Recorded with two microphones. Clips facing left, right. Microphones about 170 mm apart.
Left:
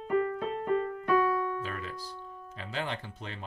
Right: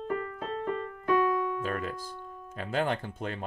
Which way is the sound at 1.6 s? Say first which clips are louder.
Right 5 dB; 50° right (ahead or behind).